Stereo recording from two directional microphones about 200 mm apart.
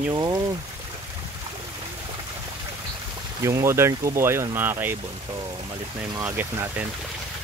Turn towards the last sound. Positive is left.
turn(degrees=-10)  # may be behind; listen again after turning